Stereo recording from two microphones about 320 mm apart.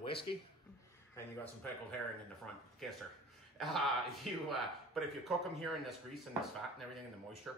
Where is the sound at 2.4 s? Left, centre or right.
Centre.